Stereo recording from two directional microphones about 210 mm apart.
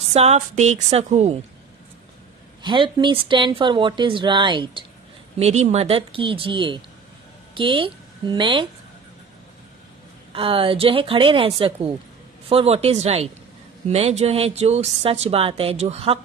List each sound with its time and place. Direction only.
0.1 s a woman's voice: 30° right (ahead or behind)
2.6 s a woman's voice: 20° right (ahead or behind)
10.3 s a woman's voice: 25° right (ahead or behind)